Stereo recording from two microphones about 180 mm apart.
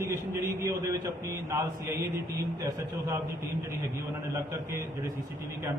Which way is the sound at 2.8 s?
15° right (ahead or behind).